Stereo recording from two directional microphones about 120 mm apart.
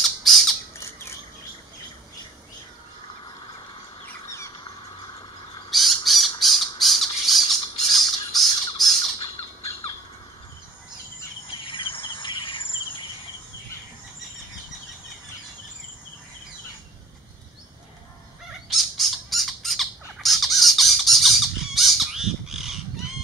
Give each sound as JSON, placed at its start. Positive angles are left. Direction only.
{"t": 0.0, "sound": "squawk", "side_deg": 0}
{"t": 5.7, "sound": "bird", "side_deg": 0}
{"t": 6.4, "sound": "squawk", "side_deg": 0}
{"t": 11.6, "sound": "insect", "side_deg": 45}
{"t": 18.7, "sound": "squawk", "side_deg": 0}